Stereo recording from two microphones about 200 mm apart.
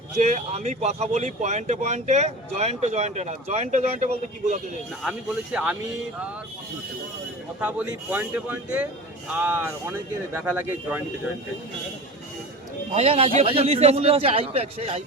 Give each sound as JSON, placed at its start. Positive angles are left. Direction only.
{"t": 0.2, "sound": "speech", "side_deg": -35}
{"t": 5.0, "sound": "speech", "side_deg": -5}
{"t": 7.6, "sound": "speech", "side_deg": -5}
{"t": 12.9, "sound": "speech", "side_deg": -30}